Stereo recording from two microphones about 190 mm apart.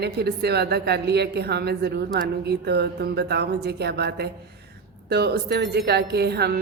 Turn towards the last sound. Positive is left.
turn(degrees=-60)  # may be behind; listen again after turning